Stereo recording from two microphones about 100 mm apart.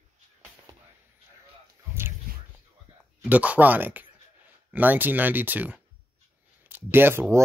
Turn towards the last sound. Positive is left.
turn(degrees=-20)  # may be behind; listen again after turning